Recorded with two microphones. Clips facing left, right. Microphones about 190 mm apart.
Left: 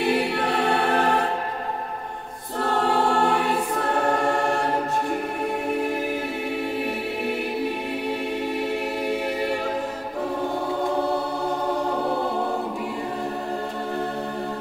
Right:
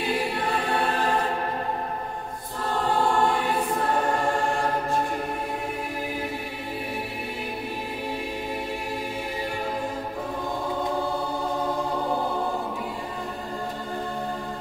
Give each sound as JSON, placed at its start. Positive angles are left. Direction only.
{"t": 0.0, "sound": "choir", "side_deg": 70}
{"t": 2.6, "sound": "choir", "side_deg": 75}
{"t": 4.3, "sound": "music", "side_deg": 70}